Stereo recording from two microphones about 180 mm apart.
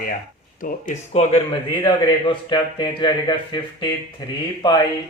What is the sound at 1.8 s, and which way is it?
A man's voice, 25° left (ahead or behind).